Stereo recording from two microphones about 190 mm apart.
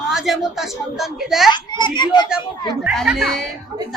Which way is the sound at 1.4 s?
25° left (ahead or behind).